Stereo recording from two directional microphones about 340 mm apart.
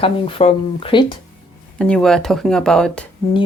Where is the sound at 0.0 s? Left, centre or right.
Centre.